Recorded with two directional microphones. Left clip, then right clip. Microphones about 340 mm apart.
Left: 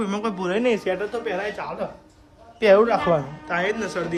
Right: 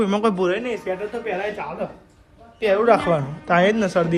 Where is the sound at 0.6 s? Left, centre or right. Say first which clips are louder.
Left 4 dB; left.